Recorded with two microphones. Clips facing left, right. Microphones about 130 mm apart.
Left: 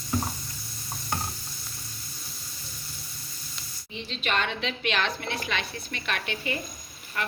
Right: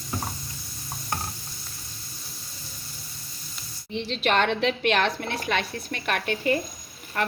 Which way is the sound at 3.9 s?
70° right (ahead or behind).